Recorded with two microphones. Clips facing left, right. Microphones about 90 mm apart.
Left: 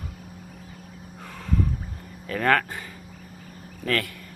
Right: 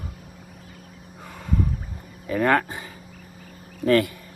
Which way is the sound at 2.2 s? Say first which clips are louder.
Right 2 dB; 10° right (ahead or behind).